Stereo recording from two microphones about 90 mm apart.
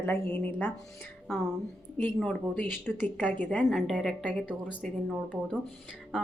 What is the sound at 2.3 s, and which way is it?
Speech, 20° left (ahead or behind).